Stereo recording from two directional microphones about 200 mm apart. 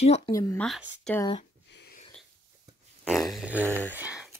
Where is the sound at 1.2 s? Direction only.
25° left (ahead or behind).